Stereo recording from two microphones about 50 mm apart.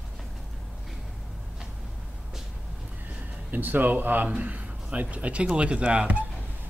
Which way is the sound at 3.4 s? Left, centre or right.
Right.